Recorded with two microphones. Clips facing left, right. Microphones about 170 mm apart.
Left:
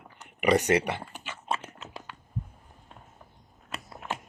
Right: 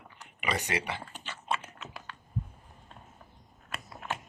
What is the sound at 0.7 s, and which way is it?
Speech, 55° left (ahead or behind).